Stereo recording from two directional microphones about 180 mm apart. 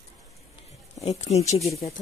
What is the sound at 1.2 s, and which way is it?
Speech, 35° left (ahead or behind).